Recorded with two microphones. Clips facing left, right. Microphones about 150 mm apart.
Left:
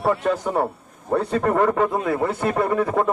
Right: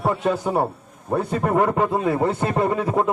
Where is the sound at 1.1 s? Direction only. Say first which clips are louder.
Left 1 dB; 10° right (ahead or behind).